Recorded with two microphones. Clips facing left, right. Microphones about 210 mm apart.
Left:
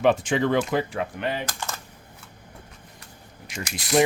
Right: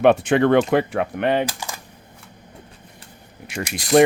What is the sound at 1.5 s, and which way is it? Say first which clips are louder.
Typing: right 3 dB; 10° right (ahead or behind).